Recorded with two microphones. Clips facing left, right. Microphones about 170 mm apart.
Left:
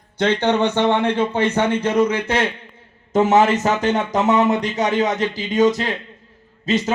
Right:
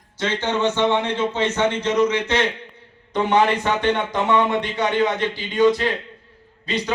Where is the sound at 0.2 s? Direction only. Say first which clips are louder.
Left 5 dB; 60° left (ahead or behind).